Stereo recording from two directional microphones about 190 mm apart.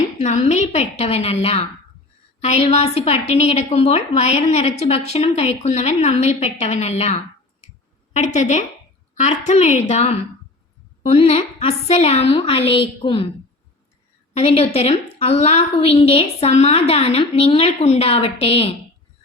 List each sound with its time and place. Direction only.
0.2 s a woman's voice: 35° left (ahead or behind)
14.3 s a woman's voice: 30° left (ahead or behind)